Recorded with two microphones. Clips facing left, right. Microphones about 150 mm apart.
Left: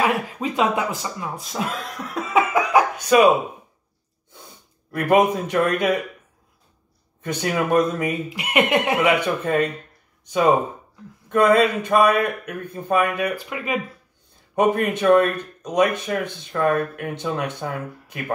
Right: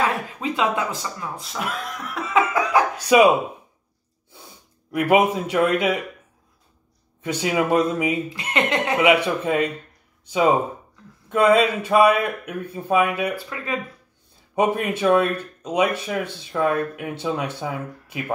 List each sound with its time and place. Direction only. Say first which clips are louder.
0.0 s speech: left 2 dB; 15° left (ahead or behind)
2.1 s music: left 1 dB; 20° left (ahead or behind)
3.1 s speech: even; 10° right (ahead or behind)
4.9 s speech: even; 10° right (ahead or behind)
7.2 s speech: right 1 dB; 10° right (ahead or behind)
8.3 s speech: left 3 dB; 15° left (ahead or behind)
9.0 s speech: right 2 dB; 10° right (ahead or behind)
14.5 s speech: left 2 dB; 10° right (ahead or behind)